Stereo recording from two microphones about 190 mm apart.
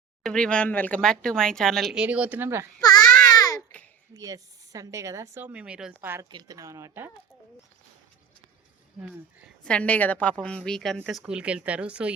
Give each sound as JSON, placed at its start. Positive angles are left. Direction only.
{"t": 0.2, "sound": "speech", "side_deg": 5}
{"t": 2.8, "sound": "baby cry", "side_deg": 20}
{"t": 3.2, "sound": "babbling", "side_deg": 20}
{"t": 4.1, "sound": "a woman's voice", "side_deg": -20}
{"t": 9.6, "sound": "a woman's voice", "side_deg": 5}